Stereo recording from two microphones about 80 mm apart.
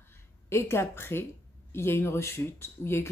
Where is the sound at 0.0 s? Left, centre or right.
Left.